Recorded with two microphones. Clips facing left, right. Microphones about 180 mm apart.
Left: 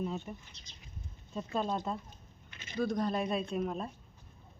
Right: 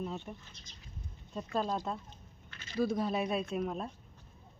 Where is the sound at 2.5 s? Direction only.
20° left (ahead or behind).